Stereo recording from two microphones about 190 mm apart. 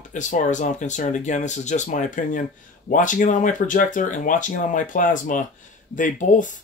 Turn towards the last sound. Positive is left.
turn(degrees=40)  # may be behind; listen again after turning